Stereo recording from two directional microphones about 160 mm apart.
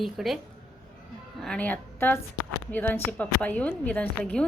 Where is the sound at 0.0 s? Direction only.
Centre (ahead or behind).